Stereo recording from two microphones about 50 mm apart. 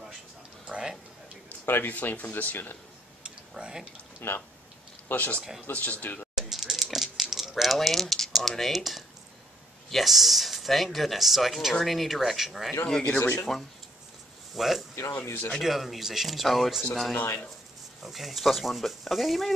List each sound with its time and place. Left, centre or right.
1.7 s speech: left
3.3 s a sound: centre
4.2 s speech: left
5.1 s speech: left
6.3 s a sound: centre
9.8 s speech: centre
13.0 s speech: left
14.5 s speech: centre
15.0 s speech: left
15.6 s speech: centre
18.0 s speech: centre